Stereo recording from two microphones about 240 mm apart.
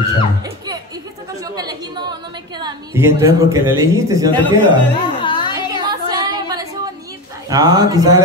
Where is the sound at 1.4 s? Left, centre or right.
Centre.